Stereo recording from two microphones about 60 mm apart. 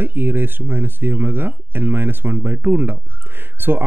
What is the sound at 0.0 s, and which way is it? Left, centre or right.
Speech, right.